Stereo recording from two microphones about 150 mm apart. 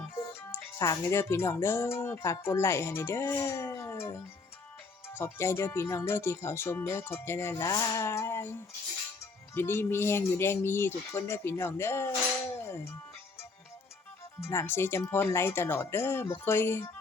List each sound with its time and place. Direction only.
0.1 s speech: 20° left (ahead or behind)
9.6 s speech: 15° left (ahead or behind)
12.6 s music: 15° left (ahead or behind)
14.4 s speech: 15° left (ahead or behind)